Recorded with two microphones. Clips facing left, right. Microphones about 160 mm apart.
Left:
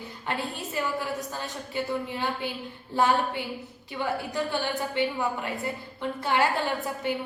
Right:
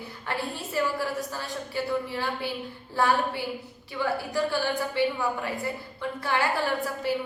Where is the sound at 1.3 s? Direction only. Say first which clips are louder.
Right 1 dB; 20° left (ahead or behind).